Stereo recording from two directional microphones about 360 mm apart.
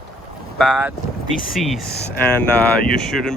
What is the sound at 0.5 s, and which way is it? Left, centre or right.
Speech, centre.